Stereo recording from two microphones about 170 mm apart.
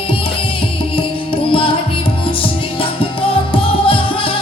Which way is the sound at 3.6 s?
30° left (ahead or behind).